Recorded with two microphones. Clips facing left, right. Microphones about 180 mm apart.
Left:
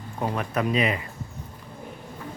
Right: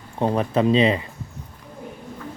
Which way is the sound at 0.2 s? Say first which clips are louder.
Right 6 dB; 30° right (ahead or behind).